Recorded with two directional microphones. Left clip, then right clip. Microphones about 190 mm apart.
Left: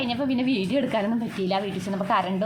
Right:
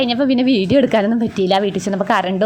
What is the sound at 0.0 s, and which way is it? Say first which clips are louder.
A woman's voice: right 10 dB; 35° right (ahead or behind).